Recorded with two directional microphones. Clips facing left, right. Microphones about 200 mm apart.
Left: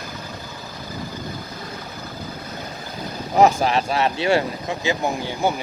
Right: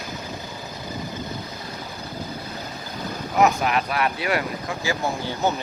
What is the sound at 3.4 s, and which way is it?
Speech, 30° left (ahead or behind).